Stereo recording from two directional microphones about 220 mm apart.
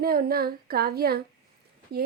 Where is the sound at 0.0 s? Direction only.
40° right (ahead or behind).